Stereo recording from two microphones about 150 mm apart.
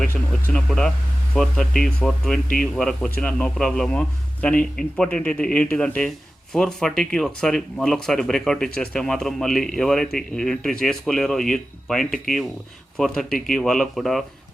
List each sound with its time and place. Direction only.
0.0 s a man's voice: 10° left (ahead or behind)